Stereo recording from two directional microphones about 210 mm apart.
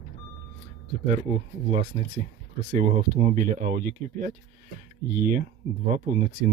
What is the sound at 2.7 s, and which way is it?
Speech, 40° right (ahead or behind).